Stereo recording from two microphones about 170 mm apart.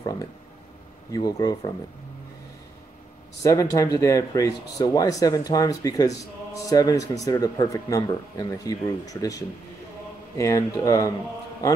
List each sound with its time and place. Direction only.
1.1 s speech: 20° left (ahead or behind)
3.4 s speech: 20° left (ahead or behind)